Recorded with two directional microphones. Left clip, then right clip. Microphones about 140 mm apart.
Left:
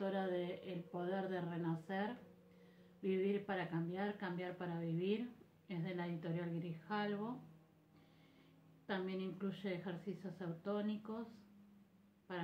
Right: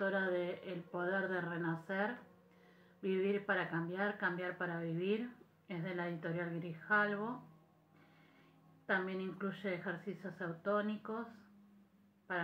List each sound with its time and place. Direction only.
0.0 s a sound: 30° left (ahead or behind)
3.0 s speech: 30° left (ahead or behind)
8.8 s a woman's voice: 25° left (ahead or behind)